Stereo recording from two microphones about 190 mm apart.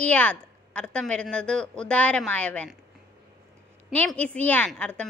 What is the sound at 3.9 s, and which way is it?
A woman's voice, 5° left (ahead or behind).